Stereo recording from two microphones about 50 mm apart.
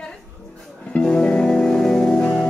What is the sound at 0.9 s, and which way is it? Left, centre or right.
Music, centre.